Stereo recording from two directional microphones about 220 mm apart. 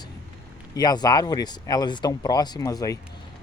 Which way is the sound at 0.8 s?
15° left (ahead or behind).